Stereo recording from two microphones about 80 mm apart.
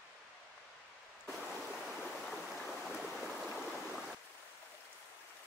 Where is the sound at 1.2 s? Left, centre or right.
Centre.